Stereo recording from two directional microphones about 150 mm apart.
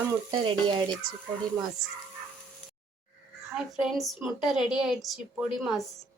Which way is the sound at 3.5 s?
5° right (ahead or behind).